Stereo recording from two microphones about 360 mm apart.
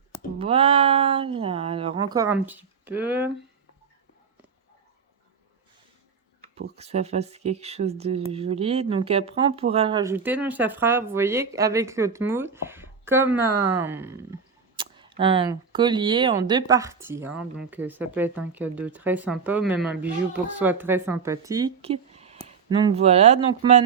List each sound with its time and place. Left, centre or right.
0.3 s speech: centre
6.4 s speech: centre